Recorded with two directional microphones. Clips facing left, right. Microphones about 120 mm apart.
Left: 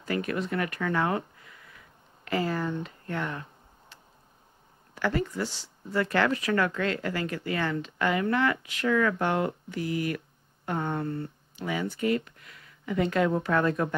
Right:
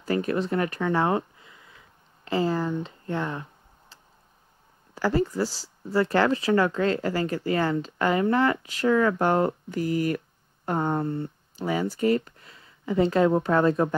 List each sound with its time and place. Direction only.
0.0 s a sound: 30° right (ahead or behind)
2.8 s speech: 30° right (ahead or behind)
4.9 s speech: 30° right (ahead or behind)
11.0 s speech: 25° right (ahead or behind)
11.5 s speech: 35° right (ahead or behind)